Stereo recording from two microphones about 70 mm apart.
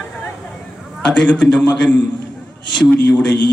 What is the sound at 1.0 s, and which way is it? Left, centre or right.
Speech, centre.